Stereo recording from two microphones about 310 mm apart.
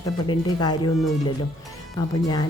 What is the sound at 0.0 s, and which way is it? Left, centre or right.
Speech, centre.